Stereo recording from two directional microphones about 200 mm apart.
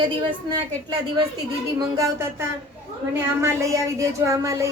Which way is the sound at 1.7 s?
15° right (ahead or behind).